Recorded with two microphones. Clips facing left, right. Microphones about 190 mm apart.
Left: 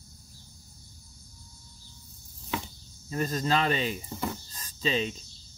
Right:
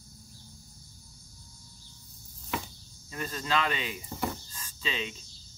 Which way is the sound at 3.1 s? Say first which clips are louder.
Left 5 dB; 40° left (ahead or behind).